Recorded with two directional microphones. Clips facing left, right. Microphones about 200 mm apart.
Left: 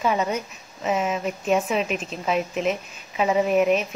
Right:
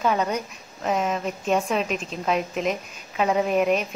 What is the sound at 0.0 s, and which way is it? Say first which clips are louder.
A woman's voice: even; 5° left (ahead or behind).